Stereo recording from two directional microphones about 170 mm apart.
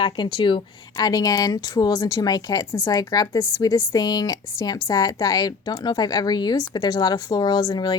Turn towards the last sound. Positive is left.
turn(degrees=25)  # may be behind; listen again after turning